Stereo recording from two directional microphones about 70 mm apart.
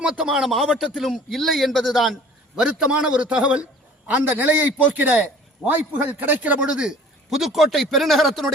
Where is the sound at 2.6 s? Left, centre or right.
Centre.